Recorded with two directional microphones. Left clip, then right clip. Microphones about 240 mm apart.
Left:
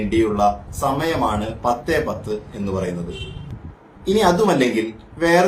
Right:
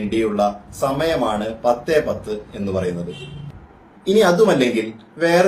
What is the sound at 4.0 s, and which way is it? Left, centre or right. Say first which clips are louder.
Speech: right 2 dB; centre.